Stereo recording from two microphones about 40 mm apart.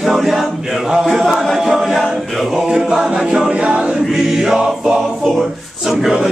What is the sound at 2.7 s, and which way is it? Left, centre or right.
Chant, centre.